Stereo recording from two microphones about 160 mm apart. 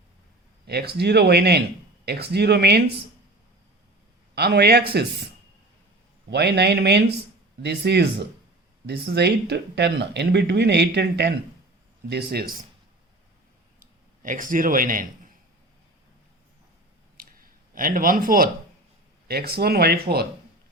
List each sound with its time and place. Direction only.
0.7 s speech: 90° right
4.4 s speech: 90° right
6.3 s speech: 90° right
12.0 s speech: 80° right
14.2 s a man's voice: 55° right (ahead or behind)
17.2 s a sound: 65° right (ahead or behind)
19.3 s speech: 75° right (ahead or behind)